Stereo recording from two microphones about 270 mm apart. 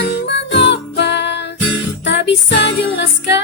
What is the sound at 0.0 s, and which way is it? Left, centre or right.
Music, left.